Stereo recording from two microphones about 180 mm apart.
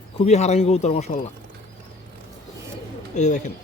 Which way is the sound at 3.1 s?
40° left (ahead or behind).